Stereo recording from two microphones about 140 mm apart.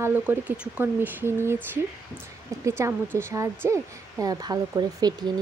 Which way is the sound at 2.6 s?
20° right (ahead or behind).